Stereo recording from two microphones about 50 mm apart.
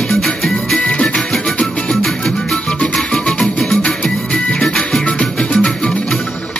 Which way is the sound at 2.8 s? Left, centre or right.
Centre.